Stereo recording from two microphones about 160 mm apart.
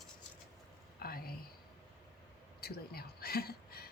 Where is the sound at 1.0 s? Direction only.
70° left (ahead or behind).